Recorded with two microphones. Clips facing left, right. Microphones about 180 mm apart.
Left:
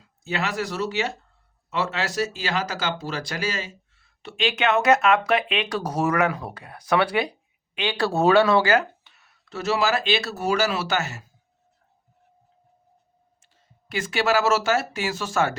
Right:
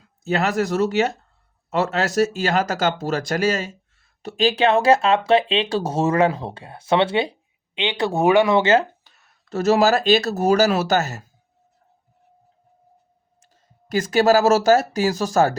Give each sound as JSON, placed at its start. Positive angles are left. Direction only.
{"t": 0.3, "sound": "speech", "side_deg": -45}
{"t": 9.0, "sound": "speech", "side_deg": -40}
{"t": 13.4, "sound": "speech", "side_deg": -40}